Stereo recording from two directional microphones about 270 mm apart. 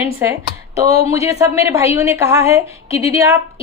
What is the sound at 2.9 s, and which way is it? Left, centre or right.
Speech, left.